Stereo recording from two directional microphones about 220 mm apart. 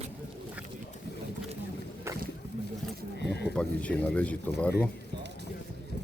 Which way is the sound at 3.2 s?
50° left (ahead or behind).